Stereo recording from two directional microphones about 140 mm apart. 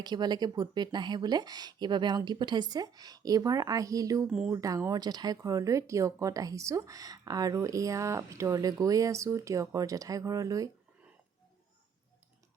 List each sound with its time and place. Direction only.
0.0 s speech: 30° right (ahead or behind)
4.3 s speech: 5° right (ahead or behind)
4.5 s speech: 25° right (ahead or behind)